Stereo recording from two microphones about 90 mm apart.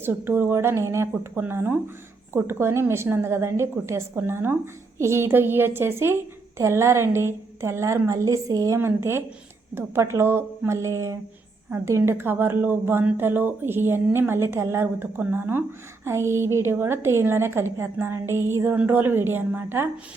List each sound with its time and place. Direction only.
0.0 s a woman's voice: 25° right (ahead or behind)